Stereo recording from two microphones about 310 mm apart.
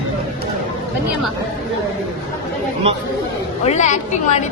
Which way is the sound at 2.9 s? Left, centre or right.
Centre.